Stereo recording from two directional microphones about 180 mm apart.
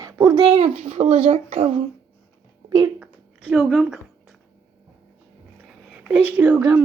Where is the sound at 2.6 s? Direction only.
20° right (ahead or behind).